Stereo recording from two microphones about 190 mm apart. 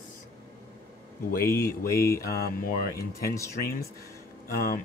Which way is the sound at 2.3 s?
50° left (ahead or behind).